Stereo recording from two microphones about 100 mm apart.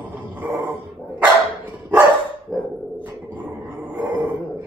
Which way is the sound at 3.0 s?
15° right (ahead or behind).